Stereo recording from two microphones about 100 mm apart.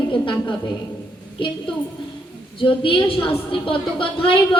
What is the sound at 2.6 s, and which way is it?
A woman's voice, 60° left (ahead or behind).